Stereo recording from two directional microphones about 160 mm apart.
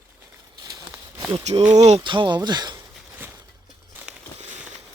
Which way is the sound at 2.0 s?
30° right (ahead or behind).